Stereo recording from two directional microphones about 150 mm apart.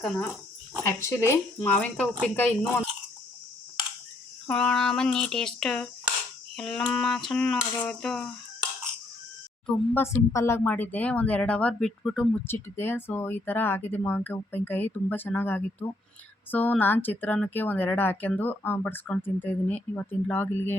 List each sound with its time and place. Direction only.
0.9 s speech: 15° left (ahead or behind)
4.4 s a sound: 5° left (ahead or behind)
9.6 s speech: 15° left (ahead or behind)